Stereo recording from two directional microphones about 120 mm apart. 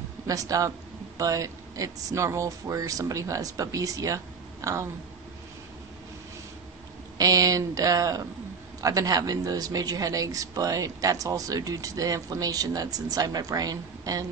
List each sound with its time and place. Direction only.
0.3 s speech: 30° right (ahead or behind)
7.2 s speech: 30° right (ahead or behind)